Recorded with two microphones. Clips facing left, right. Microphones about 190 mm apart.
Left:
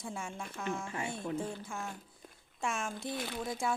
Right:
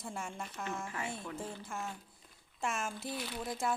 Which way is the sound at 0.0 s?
Centre (ahead or behind).